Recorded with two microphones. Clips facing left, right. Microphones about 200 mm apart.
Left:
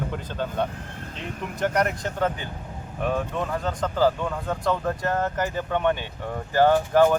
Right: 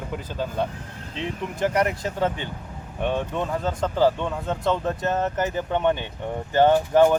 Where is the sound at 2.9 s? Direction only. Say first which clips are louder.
Right 1 dB; 30° right (ahead or behind).